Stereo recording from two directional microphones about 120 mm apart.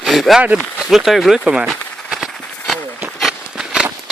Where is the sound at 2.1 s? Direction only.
Centre (ahead or behind).